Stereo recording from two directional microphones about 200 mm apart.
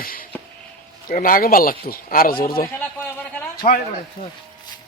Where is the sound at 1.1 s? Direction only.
45° left (ahead or behind).